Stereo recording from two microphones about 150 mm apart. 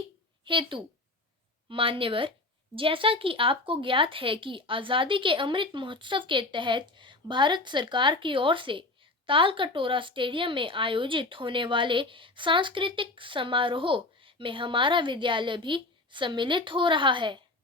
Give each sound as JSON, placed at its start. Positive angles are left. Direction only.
{"t": 0.4, "sound": "a woman's voice", "side_deg": -35}